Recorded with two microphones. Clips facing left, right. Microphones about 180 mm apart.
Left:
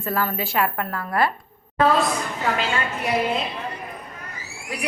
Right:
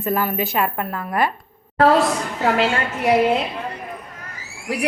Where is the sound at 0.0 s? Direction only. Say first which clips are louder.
Right 4 dB; 15° right (ahead or behind).